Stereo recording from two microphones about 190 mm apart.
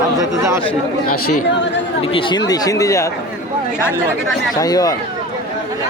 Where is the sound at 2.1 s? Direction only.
25° left (ahead or behind).